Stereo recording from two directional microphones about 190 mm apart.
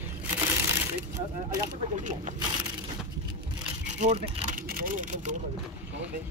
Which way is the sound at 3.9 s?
35° right (ahead or behind).